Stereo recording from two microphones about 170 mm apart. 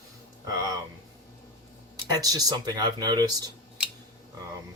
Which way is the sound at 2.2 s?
20° right (ahead or behind).